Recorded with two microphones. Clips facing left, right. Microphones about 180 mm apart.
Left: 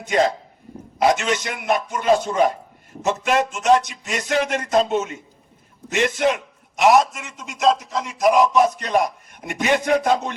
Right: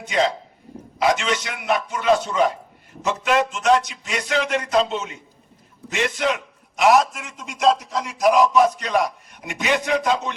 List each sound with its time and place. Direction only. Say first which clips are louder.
0.0 s a man's voice: left 2 dB; 50° left (ahead or behind)
6.8 s a man's voice: left 1 dB; 5° left (ahead or behind)
8.8 s a man's voice: left 1 dB; 50° left (ahead or behind)